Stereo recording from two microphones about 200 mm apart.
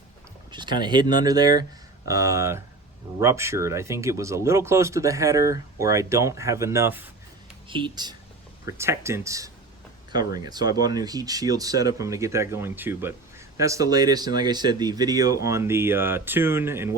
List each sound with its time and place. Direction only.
0.5 s speech: 20° right (ahead or behind)
7.7 s speech: 25° right (ahead or behind)